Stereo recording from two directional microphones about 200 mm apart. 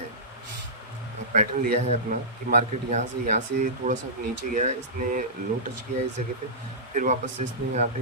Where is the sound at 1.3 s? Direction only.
45° right (ahead or behind).